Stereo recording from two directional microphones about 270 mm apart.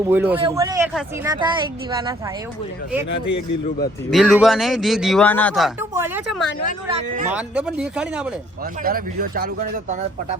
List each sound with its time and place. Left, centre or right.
0.1 s speech: centre
3.2 s a man's voice: left
4.1 s speech: centre
6.8 s speech: right
7.3 s speech: centre
8.8 s speech: right